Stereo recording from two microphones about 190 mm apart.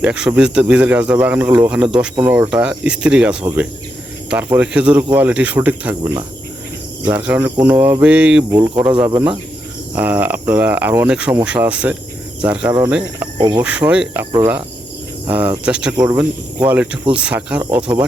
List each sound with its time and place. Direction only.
0.0 s speech: 5° right (ahead or behind)
6.0 s speech: 20° right (ahead or behind)
7.0 s speech: 5° right (ahead or behind)
13.1 s cricket: 20° right (ahead or behind)
13.6 s speech: 5° right (ahead or behind)